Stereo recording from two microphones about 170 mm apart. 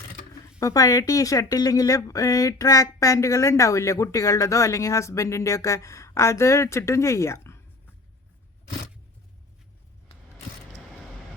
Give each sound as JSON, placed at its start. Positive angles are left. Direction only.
{"t": 0.6, "sound": "speech", "side_deg": 20}